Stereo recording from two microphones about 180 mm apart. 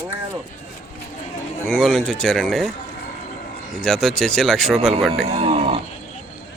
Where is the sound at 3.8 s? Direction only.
5° left (ahead or behind).